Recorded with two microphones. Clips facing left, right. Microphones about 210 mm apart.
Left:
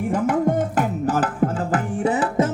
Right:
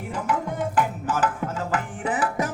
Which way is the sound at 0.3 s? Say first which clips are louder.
Left 4 dB; 45° left (ahead or behind).